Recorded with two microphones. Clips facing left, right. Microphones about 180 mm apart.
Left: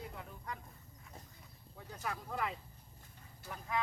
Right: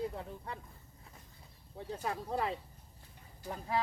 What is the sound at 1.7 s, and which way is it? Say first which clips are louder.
Speech: right 5 dB; 30° right (ahead or behind).